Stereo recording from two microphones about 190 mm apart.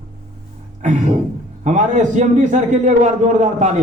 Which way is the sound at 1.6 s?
40° right (ahead or behind).